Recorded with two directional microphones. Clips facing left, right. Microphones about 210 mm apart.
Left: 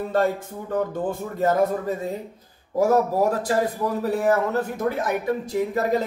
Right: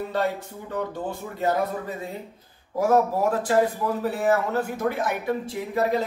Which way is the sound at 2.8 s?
40° left (ahead or behind).